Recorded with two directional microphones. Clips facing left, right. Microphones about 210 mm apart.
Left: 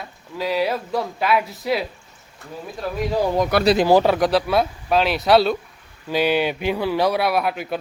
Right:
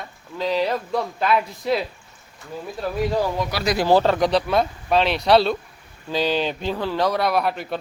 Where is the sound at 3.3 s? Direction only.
50° left (ahead or behind).